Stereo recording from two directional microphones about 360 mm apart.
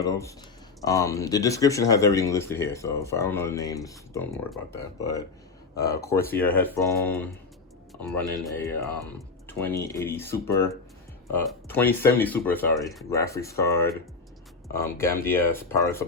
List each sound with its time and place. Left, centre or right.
0.0 s speech: centre